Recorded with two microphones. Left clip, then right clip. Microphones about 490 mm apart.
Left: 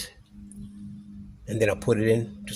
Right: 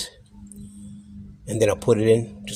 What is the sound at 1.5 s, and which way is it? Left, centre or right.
Speech, left.